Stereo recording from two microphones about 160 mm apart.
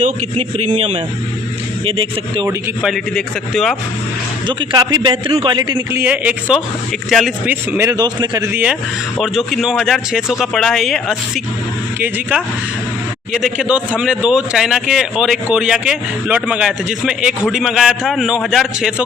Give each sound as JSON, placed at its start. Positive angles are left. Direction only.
{"t": 0.0, "sound": "a man's voice", "side_deg": -45}
{"t": 1.8, "sound": "speech", "side_deg": -35}
{"t": 2.8, "sound": "speech", "side_deg": 0}
{"t": 4.4, "sound": "a man's voice", "side_deg": -25}
{"t": 5.9, "sound": "speech", "side_deg": -15}
{"t": 9.1, "sound": "speech", "side_deg": 0}